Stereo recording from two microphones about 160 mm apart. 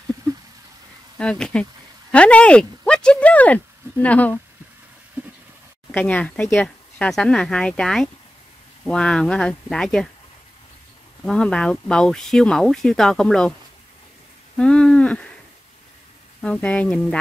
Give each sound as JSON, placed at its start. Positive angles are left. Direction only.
{"t": 1.1, "sound": "speech", "side_deg": 5}
{"t": 5.9, "sound": "speech", "side_deg": 10}
{"t": 11.2, "sound": "speech", "side_deg": 5}
{"t": 14.6, "sound": "speech", "side_deg": 5}
{"t": 16.3, "sound": "speech", "side_deg": 5}